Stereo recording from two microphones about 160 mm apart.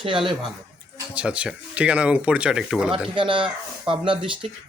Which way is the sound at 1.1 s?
5° right (ahead or behind).